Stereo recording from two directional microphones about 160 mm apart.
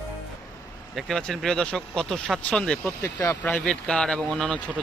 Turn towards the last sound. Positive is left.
turn(degrees=5)  # may be behind; listen again after turning